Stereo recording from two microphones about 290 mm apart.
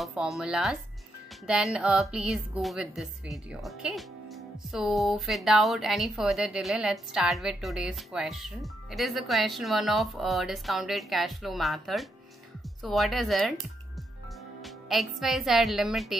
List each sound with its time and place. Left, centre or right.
0.0 s a woman's voice: centre
14.6 s a woman's voice: centre